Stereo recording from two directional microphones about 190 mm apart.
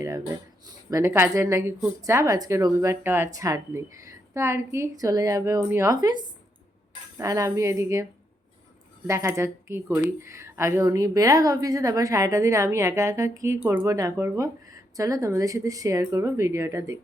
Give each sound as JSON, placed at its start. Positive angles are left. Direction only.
{"t": 0.0, "sound": "a woman's voice", "side_deg": -15}
{"t": 9.0, "sound": "a woman's voice", "side_deg": -15}